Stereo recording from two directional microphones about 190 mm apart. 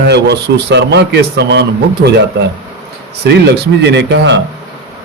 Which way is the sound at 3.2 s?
60° right (ahead or behind).